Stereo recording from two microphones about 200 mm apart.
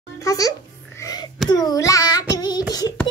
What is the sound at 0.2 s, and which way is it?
Speech, 15° left (ahead or behind).